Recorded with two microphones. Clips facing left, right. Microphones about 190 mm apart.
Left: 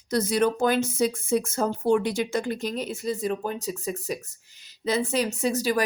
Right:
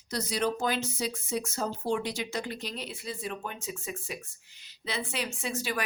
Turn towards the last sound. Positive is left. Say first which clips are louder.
# left 9 dB
turn(degrees=40)  # may be behind; listen again after turning